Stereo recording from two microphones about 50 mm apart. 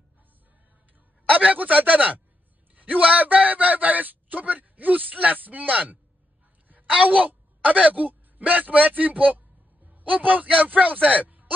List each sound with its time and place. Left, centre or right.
1.3 s speech: right
7.1 s speech: right